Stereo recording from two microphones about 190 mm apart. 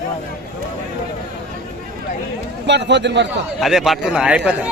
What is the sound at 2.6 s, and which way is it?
Speech, 65° right (ahead or behind).